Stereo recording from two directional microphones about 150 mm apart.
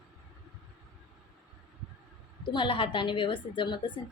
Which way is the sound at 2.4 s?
35° left (ahead or behind).